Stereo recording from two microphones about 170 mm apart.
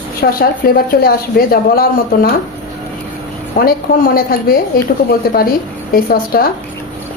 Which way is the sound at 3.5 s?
60° left (ahead or behind).